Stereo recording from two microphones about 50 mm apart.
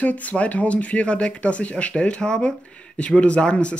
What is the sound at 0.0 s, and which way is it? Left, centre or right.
Speech, left.